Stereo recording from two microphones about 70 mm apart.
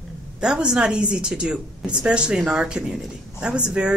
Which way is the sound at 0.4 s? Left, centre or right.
Centre.